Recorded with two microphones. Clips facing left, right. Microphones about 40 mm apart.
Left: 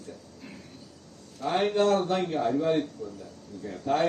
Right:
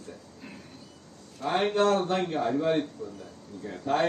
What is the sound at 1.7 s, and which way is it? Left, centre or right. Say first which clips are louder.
A man's voice: even; right.